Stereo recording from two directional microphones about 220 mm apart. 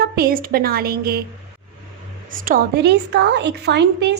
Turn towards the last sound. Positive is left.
turn(degrees=-50)  # may be behind; listen again after turning